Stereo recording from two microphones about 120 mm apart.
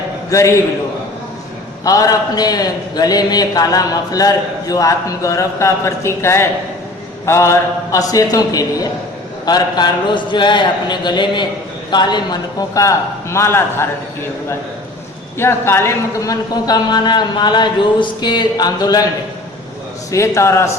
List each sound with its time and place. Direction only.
0.3 s a man's voice: 25° left (ahead or behind)
1.8 s a man's voice: 30° left (ahead or behind)
15.4 s a man's voice: 20° left (ahead or behind)
20.1 s a man's voice: 25° left (ahead or behind)